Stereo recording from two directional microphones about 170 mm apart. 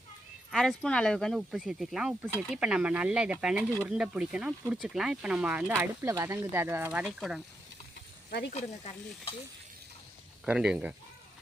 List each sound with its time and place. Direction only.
0.5 s speech: 5° left (ahead or behind); by 7.0 s 15° right (ahead or behind)
7.0 s speech: centre (ahead or behind)
8.3 s speech: 75° left (ahead or behind)
8.5 s stir: 35° left (ahead or behind)
10.4 s speech: 5° right (ahead or behind)